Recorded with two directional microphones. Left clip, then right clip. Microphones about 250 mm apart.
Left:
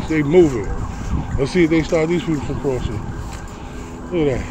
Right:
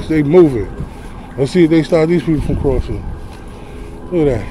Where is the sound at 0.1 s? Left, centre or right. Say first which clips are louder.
Right 4 dB; right.